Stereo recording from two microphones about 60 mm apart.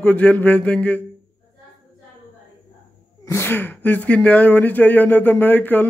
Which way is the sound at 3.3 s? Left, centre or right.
Left.